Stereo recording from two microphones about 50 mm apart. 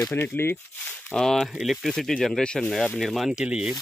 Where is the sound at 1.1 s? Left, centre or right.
Centre.